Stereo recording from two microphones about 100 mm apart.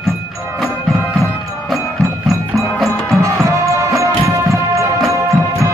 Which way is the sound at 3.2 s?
30° right (ahead or behind).